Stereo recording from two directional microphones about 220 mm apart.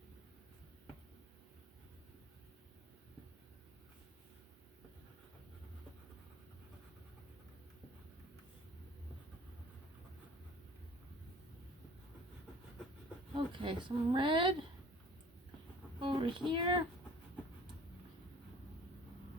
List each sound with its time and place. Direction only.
13.3 s speech: 20° right (ahead or behind)
16.0 s a sound: 20° right (ahead or behind)
16.5 s speech: 20° right (ahead or behind)